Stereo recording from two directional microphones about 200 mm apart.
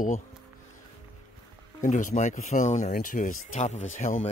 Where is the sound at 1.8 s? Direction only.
40° left (ahead or behind).